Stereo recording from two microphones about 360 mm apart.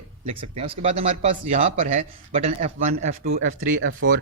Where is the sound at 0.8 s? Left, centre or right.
Centre.